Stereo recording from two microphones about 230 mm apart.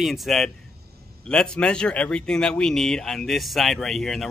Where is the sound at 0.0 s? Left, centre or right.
Centre.